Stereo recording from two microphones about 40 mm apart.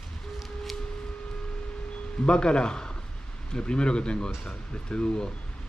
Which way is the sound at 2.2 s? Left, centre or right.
Left.